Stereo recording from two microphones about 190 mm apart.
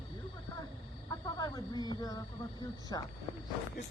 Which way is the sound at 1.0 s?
20° left (ahead or behind).